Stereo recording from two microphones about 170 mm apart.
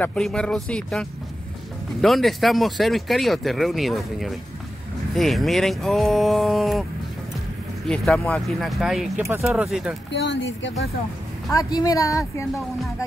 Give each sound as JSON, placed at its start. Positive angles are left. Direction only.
{"t": 0.0, "sound": "speech", "side_deg": 5}
{"t": 7.9, "sound": "speech", "side_deg": 5}
{"t": 10.1, "sound": "speech", "side_deg": 90}
{"t": 11.5, "sound": "a woman's voice", "side_deg": 20}